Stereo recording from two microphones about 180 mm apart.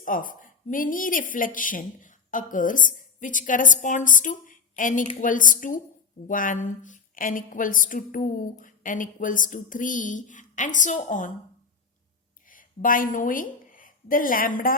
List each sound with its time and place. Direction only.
0.0 s speech: 50° left (ahead or behind)
12.5 s a woman's voice: 50° left (ahead or behind)